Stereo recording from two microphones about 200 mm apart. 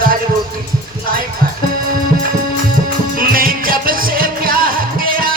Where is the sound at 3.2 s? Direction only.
45° right (ahead or behind).